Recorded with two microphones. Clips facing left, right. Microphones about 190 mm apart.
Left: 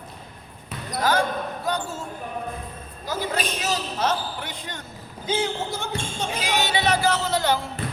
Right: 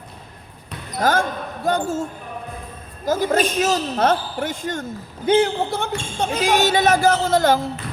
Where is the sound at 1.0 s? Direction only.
50° right (ahead or behind).